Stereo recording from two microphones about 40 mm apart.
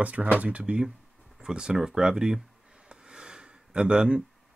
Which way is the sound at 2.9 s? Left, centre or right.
Right.